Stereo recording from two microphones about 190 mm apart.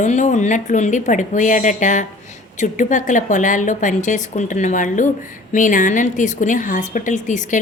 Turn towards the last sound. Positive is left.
turn(degrees=40)  # may be behind; listen again after turning